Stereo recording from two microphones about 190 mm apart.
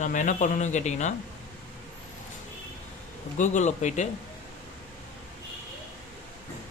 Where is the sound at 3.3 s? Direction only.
40° left (ahead or behind).